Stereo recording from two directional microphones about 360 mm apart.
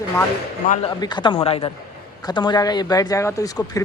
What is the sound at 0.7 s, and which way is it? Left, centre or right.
Speech, centre.